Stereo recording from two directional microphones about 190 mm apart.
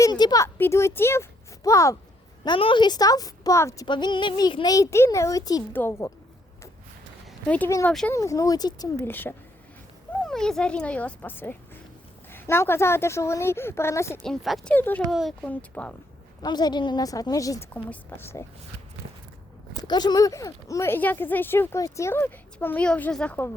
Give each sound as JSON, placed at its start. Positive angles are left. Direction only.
{"t": 0.0, "sound": "a woman's voice", "side_deg": 20}
{"t": 7.3, "sound": "speech", "side_deg": 5}
{"t": 14.3, "sound": "speech", "side_deg": 0}
{"t": 15.1, "sound": "speech", "side_deg": 0}
{"t": 16.4, "sound": "a woman's voice", "side_deg": 20}
{"t": 19.9, "sound": "speech", "side_deg": 20}